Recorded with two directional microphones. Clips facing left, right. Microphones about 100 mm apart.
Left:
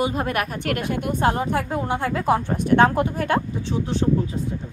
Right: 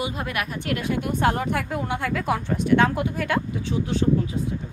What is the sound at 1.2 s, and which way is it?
Speech, 30° left (ahead or behind).